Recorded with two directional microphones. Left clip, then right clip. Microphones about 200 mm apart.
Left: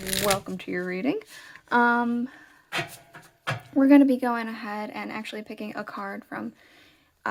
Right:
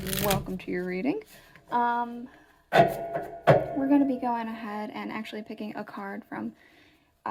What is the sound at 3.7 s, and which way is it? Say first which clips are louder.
Speech: left 7 dB; 40° left (ahead or behind).